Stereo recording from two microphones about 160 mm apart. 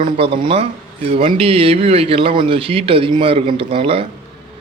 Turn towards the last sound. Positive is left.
turn(degrees=-35)  # may be behind; listen again after turning